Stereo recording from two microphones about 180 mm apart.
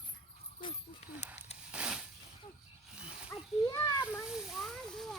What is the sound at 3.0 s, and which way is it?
Snake, 5° right (ahead or behind).